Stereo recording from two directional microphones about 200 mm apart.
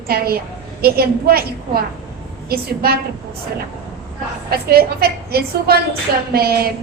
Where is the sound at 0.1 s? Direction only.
50° right (ahead or behind).